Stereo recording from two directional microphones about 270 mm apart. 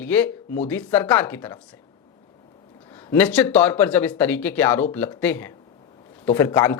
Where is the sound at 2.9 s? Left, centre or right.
Centre.